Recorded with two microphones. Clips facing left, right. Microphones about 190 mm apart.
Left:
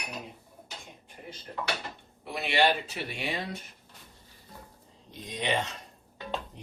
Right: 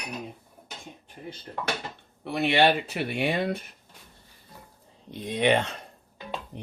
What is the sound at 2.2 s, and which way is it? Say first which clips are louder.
Speech: right 4 dB; 60° right (ahead or behind).